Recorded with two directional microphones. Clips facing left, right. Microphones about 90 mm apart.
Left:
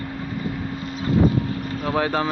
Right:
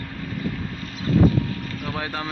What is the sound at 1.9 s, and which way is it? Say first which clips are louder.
Vehicle: left 8 dB; 45° left (ahead or behind).